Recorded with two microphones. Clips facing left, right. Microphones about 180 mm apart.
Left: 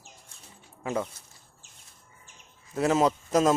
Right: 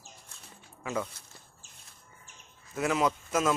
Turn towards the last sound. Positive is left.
turn(degrees=35)  # may be behind; listen again after turning